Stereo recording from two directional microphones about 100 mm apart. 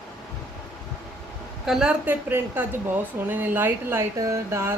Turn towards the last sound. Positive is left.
turn(degrees=-25)  # may be behind; listen again after turning